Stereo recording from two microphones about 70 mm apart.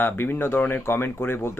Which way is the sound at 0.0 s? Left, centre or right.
Left.